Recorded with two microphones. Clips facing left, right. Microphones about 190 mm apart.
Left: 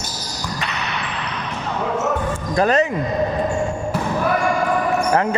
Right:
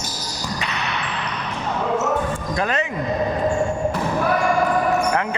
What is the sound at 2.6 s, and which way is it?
Speech, 40° left (ahead or behind).